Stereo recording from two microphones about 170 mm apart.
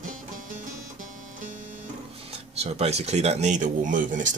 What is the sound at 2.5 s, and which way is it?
Speech, 40° right (ahead or behind).